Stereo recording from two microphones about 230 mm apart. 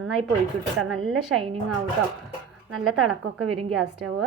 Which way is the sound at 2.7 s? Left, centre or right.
Right.